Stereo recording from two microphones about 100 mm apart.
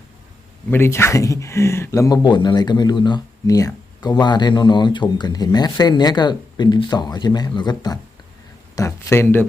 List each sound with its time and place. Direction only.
0.7 s speech: 25° left (ahead or behind); by 3.2 s 45° left (ahead or behind)
3.4 s speech: 35° left (ahead or behind)
8.7 s speech: 30° left (ahead or behind)